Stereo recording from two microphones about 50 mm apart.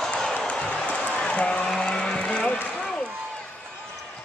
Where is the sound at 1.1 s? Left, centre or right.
Left.